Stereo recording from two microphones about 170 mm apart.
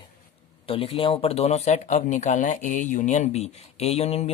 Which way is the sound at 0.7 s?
30° left (ahead or behind).